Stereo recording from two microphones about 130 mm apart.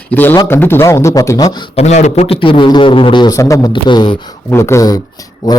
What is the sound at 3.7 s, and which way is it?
Speech, 35° left (ahead or behind).